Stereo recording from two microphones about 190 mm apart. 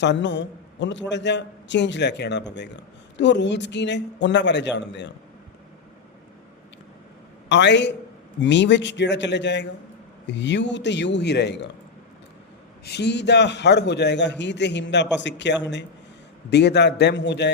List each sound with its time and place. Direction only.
0.0 s a man's voice: 65° left (ahead or behind)
7.4 s a man's voice: 65° left (ahead or behind)
12.8 s a man's voice: 60° left (ahead or behind)